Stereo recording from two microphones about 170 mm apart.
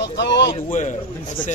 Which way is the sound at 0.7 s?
45° left (ahead or behind).